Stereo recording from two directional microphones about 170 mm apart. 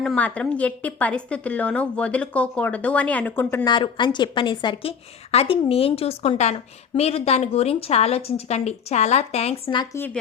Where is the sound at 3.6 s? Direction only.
25° left (ahead or behind).